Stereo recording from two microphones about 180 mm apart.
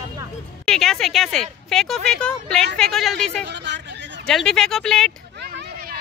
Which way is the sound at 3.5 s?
75° right (ahead or behind).